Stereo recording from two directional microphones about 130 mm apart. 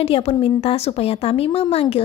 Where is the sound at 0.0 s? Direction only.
50° left (ahead or behind).